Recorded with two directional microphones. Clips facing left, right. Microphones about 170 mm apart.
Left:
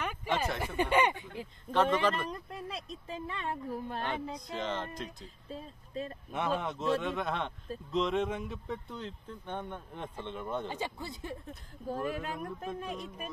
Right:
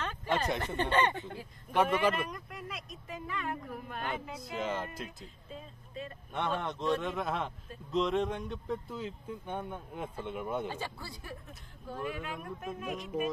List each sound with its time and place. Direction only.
0.0 s a sound: 10° left (ahead or behind)
0.6 s speech: 10° left (ahead or behind)
1.7 s a man's voice: 10° right (ahead or behind)
2.2 s speech: 30° left (ahead or behind)
4.1 s speech: 5° right (ahead or behind)
5.5 s speech: 35° left (ahead or behind)
6.3 s speech: centre (ahead or behind)
10.7 s speech: 20° left (ahead or behind)
11.8 s speech: 40° left (ahead or behind)